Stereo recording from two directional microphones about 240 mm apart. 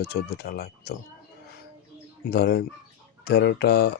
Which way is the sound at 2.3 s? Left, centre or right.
Left.